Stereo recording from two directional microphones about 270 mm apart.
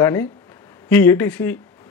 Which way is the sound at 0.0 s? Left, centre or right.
Centre.